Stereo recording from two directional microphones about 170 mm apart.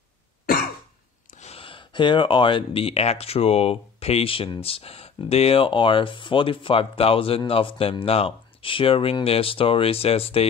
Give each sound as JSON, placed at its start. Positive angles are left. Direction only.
{"t": 1.4, "sound": "speech", "side_deg": 35}